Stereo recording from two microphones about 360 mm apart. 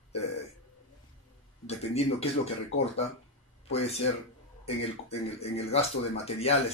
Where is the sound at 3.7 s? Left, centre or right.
Centre.